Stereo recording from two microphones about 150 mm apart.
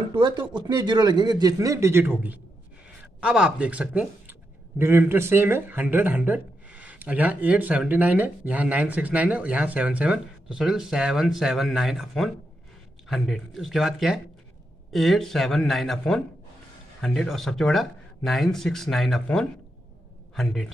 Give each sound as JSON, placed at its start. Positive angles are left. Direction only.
{"t": 0.1, "sound": "a man's voice", "side_deg": -30}